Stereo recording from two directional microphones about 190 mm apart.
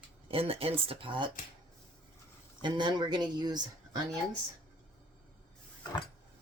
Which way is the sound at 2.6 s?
25° right (ahead or behind).